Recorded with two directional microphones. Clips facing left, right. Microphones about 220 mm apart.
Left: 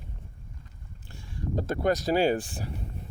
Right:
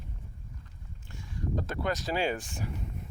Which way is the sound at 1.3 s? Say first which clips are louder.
Left 4 dB; 35° left (ahead or behind).